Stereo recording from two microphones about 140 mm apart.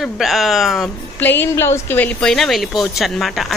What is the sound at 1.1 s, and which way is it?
A woman's voice, 15° left (ahead or behind).